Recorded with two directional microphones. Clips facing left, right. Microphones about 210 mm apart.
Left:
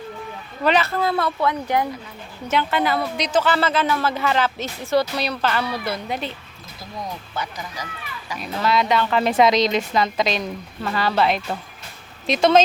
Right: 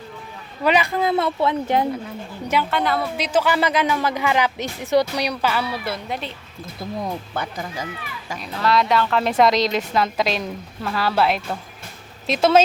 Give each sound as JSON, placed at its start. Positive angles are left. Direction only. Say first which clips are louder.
{"t": 0.6, "sound": "speech", "louder": "right 1 dB", "side_deg": -10}
{"t": 2.6, "sound": "speech", "louder": "even", "side_deg": 0}
{"t": 7.0, "sound": "speech", "louder": "even", "side_deg": -55}
{"t": 8.4, "sound": "a woman's voice", "louder": "right 1 dB", "side_deg": 0}